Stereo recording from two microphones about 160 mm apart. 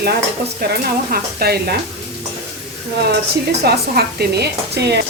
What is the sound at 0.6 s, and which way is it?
Speech, 80° right.